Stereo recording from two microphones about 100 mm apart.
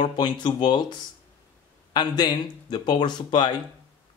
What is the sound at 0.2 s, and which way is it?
Speech, 50° left (ahead or behind).